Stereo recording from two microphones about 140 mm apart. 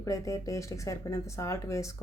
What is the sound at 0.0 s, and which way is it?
Speech, 25° left (ahead or behind).